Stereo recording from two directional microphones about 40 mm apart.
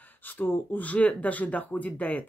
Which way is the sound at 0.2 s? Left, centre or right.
Left.